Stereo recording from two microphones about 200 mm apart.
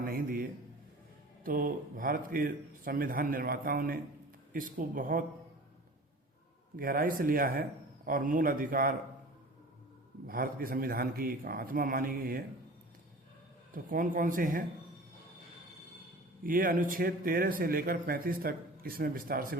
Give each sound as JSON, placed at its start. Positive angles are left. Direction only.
{"t": 0.0, "sound": "a man's voice", "side_deg": -45}
{"t": 1.5, "sound": "speech", "side_deg": -45}
{"t": 6.7, "sound": "speech", "side_deg": -45}
{"t": 10.2, "sound": "speech", "side_deg": -45}
{"t": 13.7, "sound": "speech", "side_deg": -45}
{"t": 16.4, "sound": "speech", "side_deg": -45}